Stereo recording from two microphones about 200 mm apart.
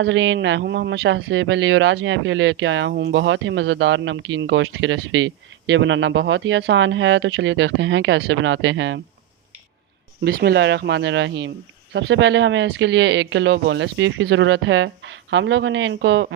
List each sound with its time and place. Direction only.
0.0 s speech: 70° right (ahead or behind)
10.2 s speech: 55° right (ahead or behind)